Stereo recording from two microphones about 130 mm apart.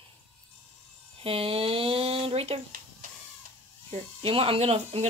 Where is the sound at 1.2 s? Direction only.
45° right (ahead or behind).